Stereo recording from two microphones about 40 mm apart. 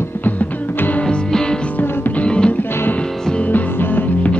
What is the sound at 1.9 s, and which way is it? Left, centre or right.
Music, left.